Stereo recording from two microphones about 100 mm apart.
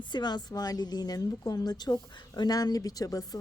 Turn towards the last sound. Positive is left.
turn(degrees=35)  # may be behind; listen again after turning